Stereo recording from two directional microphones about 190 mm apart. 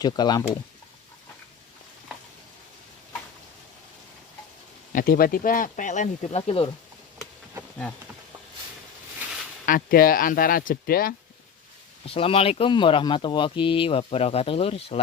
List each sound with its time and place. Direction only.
0.0 s speech: 20° left (ahead or behind)
4.9 s speech: 45° left (ahead or behind); by 6.7 s 30° left (ahead or behind)
9.6 s speech: 50° left (ahead or behind)
12.0 s speech: 30° left (ahead or behind)